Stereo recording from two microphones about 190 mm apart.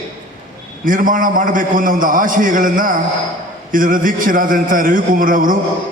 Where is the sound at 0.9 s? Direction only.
45° right (ahead or behind).